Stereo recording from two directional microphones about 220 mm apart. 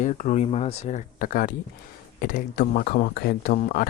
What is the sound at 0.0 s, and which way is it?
Speech, 35° left (ahead or behind).